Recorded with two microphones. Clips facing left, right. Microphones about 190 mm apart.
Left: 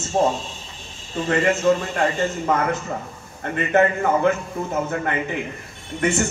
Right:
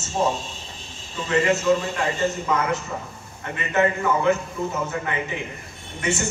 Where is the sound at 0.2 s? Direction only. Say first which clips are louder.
Left 3 dB; 55° left (ahead or behind).